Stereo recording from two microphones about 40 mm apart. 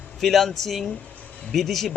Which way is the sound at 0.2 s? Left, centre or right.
Centre.